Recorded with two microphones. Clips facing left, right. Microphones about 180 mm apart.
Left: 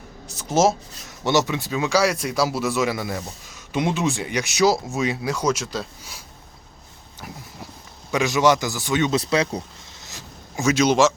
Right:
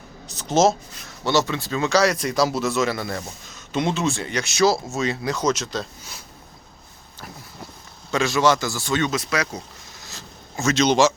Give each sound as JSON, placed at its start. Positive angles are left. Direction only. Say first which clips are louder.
{"t": 0.3, "sound": "speech", "louder": "right 1 dB", "side_deg": 10}
{"t": 8.1, "sound": "speech", "louder": "left 1 dB", "side_deg": 15}
{"t": 9.1, "sound": "speech", "louder": "left 4 dB", "side_deg": 30}
{"t": 10.0, "sound": "a sound", "louder": "left 1 dB", "side_deg": 15}